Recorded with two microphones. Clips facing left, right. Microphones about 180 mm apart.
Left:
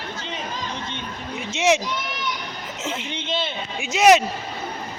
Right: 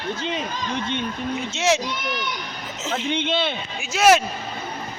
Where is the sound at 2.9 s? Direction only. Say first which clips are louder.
Right 8 dB; 55° right (ahead or behind).